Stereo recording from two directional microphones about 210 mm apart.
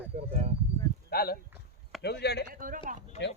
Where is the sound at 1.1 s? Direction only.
45° left (ahead or behind).